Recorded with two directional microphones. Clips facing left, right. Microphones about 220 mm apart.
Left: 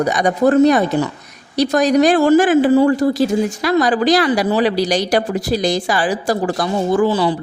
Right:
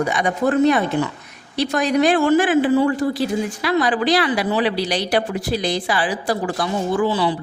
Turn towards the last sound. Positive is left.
turn(degrees=45)  # may be behind; listen again after turning